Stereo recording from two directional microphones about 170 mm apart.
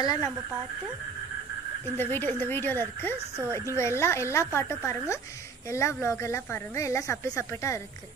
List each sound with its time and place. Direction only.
0.0 s speech: 20° left (ahead or behind)
2.0 s speech: 10° left (ahead or behind)